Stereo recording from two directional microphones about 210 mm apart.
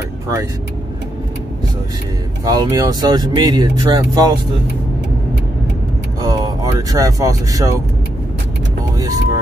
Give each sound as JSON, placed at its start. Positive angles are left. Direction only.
{"t": 2.4, "sound": "speech", "side_deg": -20}
{"t": 6.2, "sound": "speech", "side_deg": -15}
{"t": 8.9, "sound": "speech", "side_deg": -20}